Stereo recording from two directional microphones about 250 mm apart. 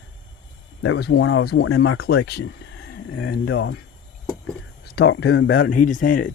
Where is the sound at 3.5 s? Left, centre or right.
Left.